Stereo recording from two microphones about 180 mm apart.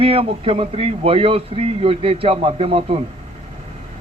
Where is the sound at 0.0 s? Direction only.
35° right (ahead or behind).